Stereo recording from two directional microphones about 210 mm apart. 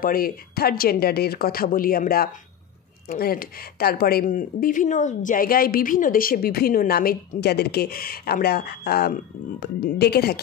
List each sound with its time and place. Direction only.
0.0 s speech: 45° left (ahead or behind)